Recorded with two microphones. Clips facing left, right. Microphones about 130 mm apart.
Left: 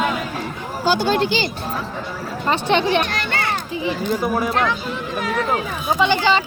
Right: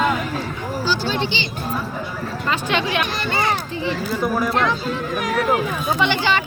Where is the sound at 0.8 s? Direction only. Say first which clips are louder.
Left 5 dB; 50° left (ahead or behind).